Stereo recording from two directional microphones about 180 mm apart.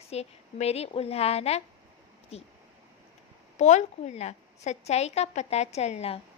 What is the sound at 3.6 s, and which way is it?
A woman's voice, 40° left (ahead or behind).